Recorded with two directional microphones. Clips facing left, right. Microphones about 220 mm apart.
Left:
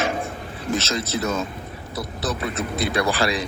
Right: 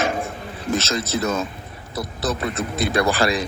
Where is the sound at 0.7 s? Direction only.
45° right (ahead or behind).